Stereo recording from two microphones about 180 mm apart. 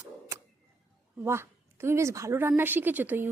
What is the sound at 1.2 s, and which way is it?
A woman's voice, 15° right (ahead or behind).